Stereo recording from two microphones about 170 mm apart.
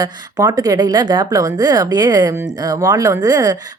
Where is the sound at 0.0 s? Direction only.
20° right (ahead or behind).